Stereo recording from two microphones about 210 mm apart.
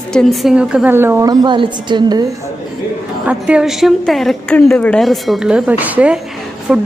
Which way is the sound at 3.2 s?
5° right (ahead or behind).